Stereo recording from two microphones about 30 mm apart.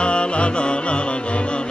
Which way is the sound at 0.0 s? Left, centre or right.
Left.